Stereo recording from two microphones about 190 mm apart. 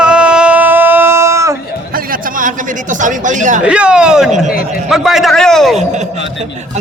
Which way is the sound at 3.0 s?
40° right (ahead or behind).